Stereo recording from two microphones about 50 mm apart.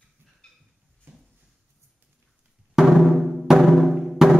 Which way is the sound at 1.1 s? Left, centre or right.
Right.